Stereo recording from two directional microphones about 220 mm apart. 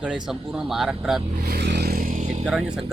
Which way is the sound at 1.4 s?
45° right (ahead or behind).